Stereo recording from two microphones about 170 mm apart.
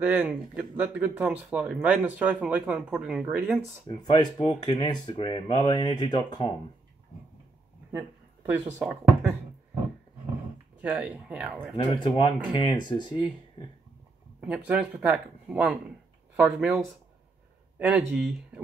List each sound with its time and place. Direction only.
0.0 s speech: 5° right (ahead or behind)
3.8 s speech: 30° left (ahead or behind)
8.7 s speech: 5° right (ahead or behind)
10.8 s speech: 10° right (ahead or behind)
11.7 s speech: 30° left (ahead or behind)
14.7 s speech: 5° right (ahead or behind)